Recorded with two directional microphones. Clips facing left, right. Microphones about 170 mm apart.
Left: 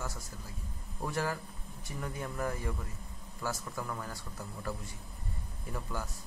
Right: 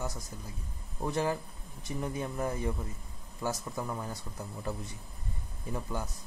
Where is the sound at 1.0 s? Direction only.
20° right (ahead or behind).